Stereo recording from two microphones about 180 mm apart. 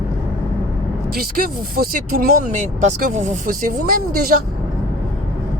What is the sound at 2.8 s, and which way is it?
Speech, 40° right (ahead or behind).